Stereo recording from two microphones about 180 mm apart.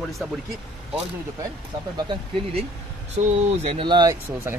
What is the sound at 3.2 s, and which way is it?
Speech, 35° right (ahead or behind).